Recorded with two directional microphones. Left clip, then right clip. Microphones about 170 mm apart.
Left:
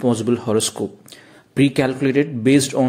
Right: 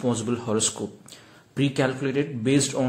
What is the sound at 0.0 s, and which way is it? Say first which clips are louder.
Speech: left 7 dB; 30° left (ahead or behind).